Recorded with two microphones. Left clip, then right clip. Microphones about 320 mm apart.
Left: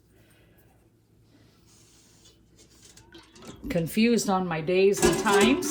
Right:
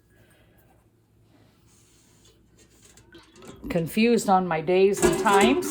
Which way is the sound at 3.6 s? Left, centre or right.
Right.